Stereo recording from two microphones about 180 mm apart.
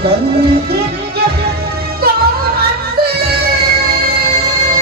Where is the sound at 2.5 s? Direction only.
60° right (ahead or behind).